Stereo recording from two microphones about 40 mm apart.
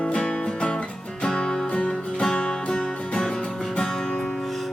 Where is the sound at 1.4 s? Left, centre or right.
Left.